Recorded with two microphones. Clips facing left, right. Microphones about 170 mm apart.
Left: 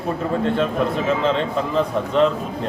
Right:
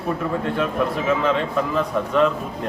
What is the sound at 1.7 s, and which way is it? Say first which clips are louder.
Speech: left 3 dB; 25° left (ahead or behind).